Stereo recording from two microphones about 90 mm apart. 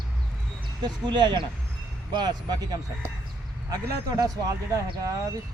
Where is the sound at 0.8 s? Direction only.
55° right (ahead or behind).